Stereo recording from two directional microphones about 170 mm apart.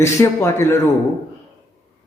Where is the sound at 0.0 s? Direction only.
15° left (ahead or behind).